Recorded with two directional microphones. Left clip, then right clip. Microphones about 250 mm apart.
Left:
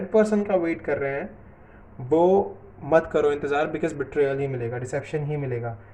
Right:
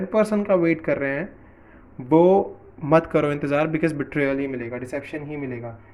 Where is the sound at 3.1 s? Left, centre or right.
Right.